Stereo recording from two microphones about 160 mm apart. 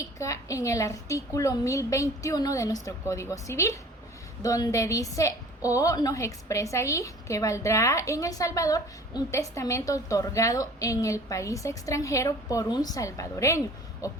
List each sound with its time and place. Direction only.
0.0 s a woman's voice: 20° left (ahead or behind)